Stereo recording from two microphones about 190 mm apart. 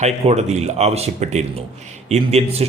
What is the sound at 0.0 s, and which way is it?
A man's voice, 35° right (ahead or behind).